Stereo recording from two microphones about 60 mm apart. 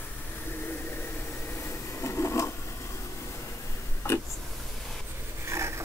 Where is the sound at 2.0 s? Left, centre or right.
Left.